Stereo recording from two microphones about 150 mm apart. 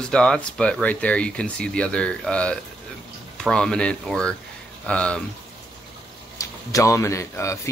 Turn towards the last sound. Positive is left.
turn(degrees=20)  # may be behind; listen again after turning